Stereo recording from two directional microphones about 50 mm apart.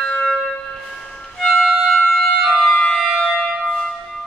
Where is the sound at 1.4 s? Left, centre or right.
Centre.